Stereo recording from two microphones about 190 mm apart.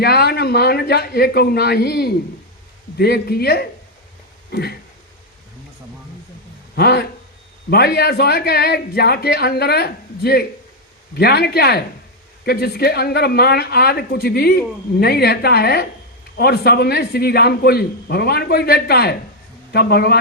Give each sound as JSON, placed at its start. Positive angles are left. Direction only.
{"t": 0.0, "sound": "speech", "side_deg": 55}
{"t": 6.7, "sound": "a man's voice", "side_deg": 60}